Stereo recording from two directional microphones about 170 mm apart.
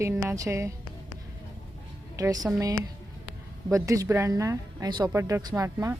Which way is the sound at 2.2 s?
20° right (ahead or behind).